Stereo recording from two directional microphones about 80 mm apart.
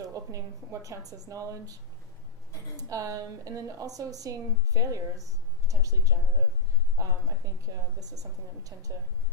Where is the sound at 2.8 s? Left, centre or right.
Right.